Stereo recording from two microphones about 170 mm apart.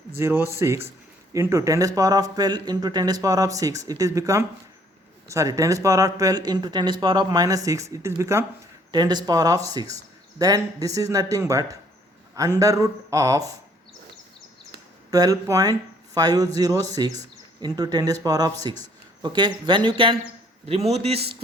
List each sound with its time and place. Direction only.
0.2 s speech: 15° right (ahead or behind)
15.1 s a man's voice: 20° right (ahead or behind); by 21.2 s 35° right (ahead or behind)